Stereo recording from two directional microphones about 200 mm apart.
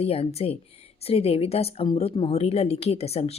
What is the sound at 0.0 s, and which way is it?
A woman's voice, 30° left (ahead or behind).